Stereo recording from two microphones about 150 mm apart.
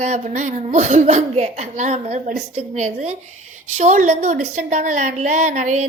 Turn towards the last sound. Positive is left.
turn(degrees=-55)  # may be behind; listen again after turning